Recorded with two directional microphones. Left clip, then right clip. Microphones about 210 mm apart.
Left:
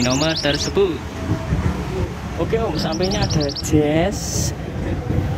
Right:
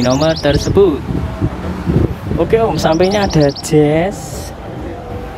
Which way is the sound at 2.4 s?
35° right (ahead or behind).